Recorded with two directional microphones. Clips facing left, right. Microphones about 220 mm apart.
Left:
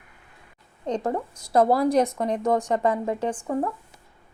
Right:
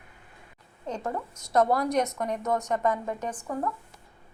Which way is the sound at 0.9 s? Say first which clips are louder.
Left 6 dB; 35° left (ahead or behind).